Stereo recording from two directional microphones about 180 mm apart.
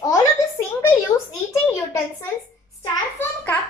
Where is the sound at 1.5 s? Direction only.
15° left (ahead or behind).